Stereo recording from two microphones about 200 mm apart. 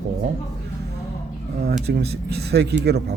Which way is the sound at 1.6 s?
55° right (ahead or behind).